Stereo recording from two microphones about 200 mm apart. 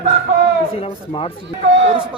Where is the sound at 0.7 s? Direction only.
30° left (ahead or behind).